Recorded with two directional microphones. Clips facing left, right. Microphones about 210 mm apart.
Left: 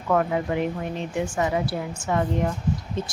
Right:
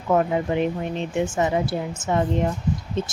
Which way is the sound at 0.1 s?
25° right (ahead or behind).